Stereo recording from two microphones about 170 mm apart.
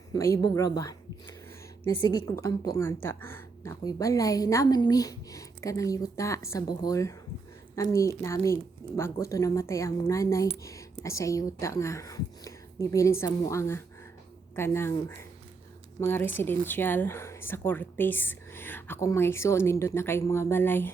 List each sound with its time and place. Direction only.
0.1 s speech: 20° left (ahead or behind)
2.0 s a woman's voice: 15° left (ahead or behind)